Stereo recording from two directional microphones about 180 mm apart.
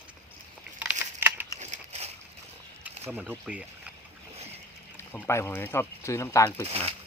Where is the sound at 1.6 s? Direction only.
35° right (ahead or behind).